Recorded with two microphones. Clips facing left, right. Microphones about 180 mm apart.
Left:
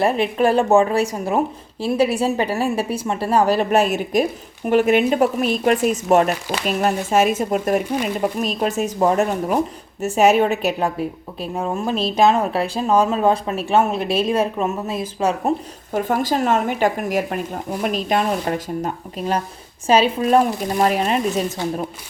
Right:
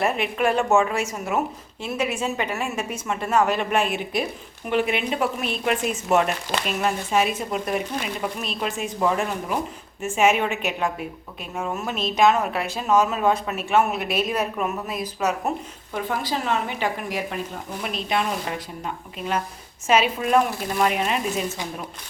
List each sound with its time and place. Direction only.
0.0 s a woman's voice: 30° left (ahead or behind)
15.9 s a woman's voice: 45° left (ahead or behind)